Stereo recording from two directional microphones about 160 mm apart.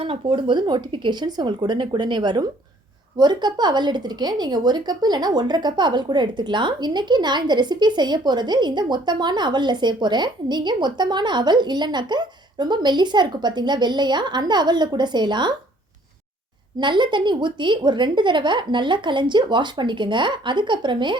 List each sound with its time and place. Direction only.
0.0 s a woman's voice: 35° right (ahead or behind)
16.7 s a woman's voice: 30° right (ahead or behind)